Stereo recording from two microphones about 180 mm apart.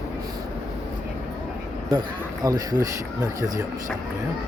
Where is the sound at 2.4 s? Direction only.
20° right (ahead or behind).